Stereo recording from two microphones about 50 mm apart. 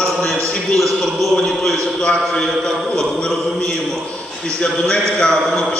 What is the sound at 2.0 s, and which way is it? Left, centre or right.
A man's voice, centre.